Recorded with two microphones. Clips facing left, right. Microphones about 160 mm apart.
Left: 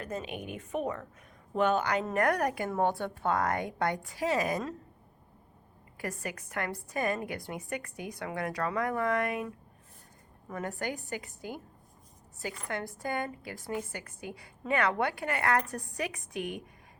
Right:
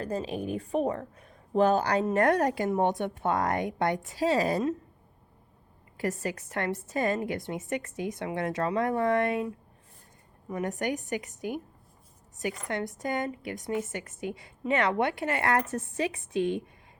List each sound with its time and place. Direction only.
0.0 s a woman's voice: 35° right (ahead or behind)
6.0 s a woman's voice: 25° right (ahead or behind)
10.5 s a woman's voice: 20° right (ahead or behind)